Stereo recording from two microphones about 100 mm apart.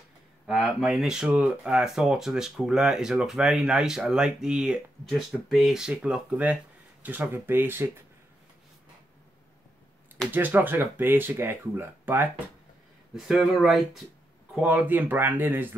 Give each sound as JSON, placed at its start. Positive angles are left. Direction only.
{"t": 0.5, "sound": "speech", "side_deg": -5}
{"t": 10.3, "sound": "speech", "side_deg": -20}
{"t": 13.1, "sound": "speech", "side_deg": -5}
{"t": 14.5, "sound": "speech", "side_deg": -10}